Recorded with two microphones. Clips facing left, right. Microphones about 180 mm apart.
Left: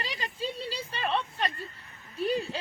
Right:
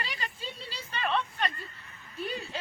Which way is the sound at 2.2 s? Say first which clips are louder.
Left 7 dB; 35° left (ahead or behind).